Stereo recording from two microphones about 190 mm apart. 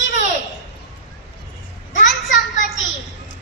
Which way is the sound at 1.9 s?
40° left (ahead or behind).